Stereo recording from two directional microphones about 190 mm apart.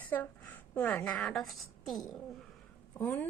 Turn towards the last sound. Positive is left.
turn(degrees=10)  # may be behind; listen again after turning